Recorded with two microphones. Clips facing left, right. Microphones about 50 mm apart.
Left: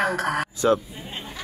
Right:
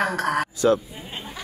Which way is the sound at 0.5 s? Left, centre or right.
Left.